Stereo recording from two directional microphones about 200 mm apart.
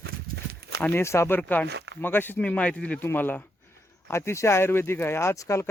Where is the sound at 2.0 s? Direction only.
10° left (ahead or behind).